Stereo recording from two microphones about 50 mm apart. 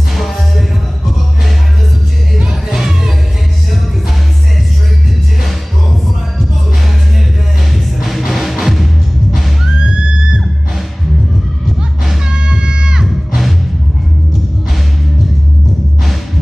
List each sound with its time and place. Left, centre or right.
0.1 s music: centre
2.7 s music: centre
7.7 s music: centre
12.3 s music: centre